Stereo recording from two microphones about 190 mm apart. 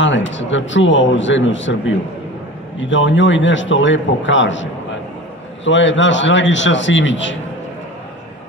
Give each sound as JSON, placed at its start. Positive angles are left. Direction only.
{"t": 0.0, "sound": "speech", "side_deg": 75}
{"t": 5.7, "sound": "speech", "side_deg": 75}